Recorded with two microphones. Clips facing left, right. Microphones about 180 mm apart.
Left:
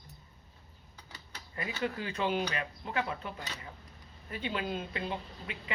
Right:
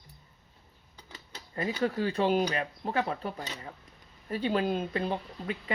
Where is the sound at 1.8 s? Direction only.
35° right (ahead or behind).